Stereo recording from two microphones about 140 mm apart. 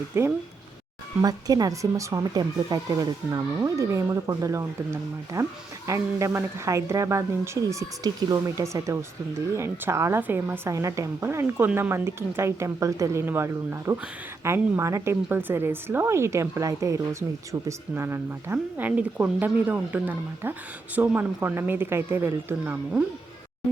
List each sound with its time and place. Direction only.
0.1 s a woman's voice: 20° right (ahead or behind)